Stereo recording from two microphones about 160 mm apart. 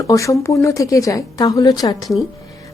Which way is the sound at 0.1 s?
20° left (ahead or behind).